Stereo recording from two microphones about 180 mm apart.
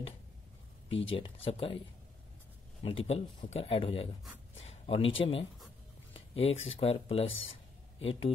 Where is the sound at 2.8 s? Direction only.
30° left (ahead or behind).